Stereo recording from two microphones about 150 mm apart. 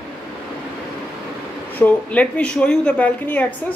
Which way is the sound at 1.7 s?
10° left (ahead or behind).